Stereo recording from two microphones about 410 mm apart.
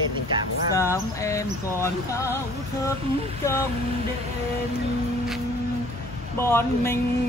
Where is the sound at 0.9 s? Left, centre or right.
Centre.